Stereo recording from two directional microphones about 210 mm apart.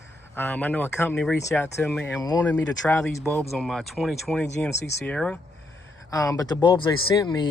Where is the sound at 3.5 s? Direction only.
Centre (ahead or behind).